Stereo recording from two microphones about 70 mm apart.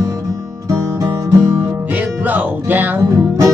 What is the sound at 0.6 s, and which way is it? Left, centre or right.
Music, right.